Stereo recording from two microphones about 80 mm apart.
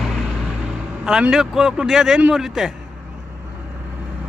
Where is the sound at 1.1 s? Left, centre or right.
Centre.